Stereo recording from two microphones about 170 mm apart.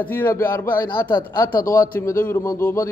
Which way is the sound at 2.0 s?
15° left (ahead or behind).